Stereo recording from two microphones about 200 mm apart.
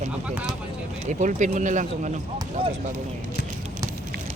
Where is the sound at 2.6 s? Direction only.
25° right (ahead or behind).